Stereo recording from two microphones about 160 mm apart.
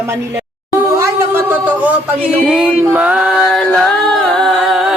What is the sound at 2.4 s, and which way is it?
Music, 5° right (ahead or behind).